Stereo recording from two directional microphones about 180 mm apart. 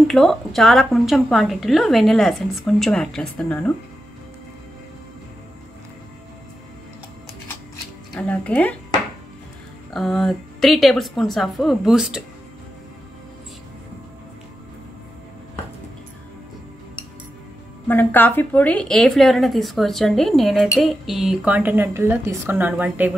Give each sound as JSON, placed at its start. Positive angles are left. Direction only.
{"t": 0.1, "sound": "a woman's voice", "side_deg": 0}
{"t": 8.1, "sound": "speech", "side_deg": 5}
{"t": 9.9, "sound": "a woman's voice", "side_deg": 0}
{"t": 17.8, "sound": "a woman's voice", "side_deg": 10}